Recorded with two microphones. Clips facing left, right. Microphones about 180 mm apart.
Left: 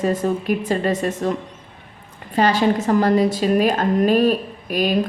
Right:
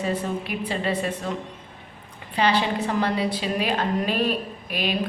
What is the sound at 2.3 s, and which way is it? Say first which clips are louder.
A woman's voice: left 5 dB; 45° left (ahead or behind).